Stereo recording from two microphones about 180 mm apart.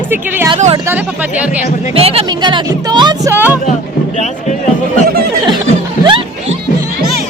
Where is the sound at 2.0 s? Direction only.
35° right (ahead or behind).